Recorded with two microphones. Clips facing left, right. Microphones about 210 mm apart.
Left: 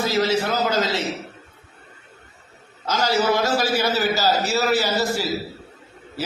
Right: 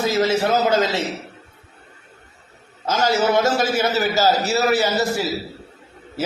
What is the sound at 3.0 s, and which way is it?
A man's voice, 25° right (ahead or behind).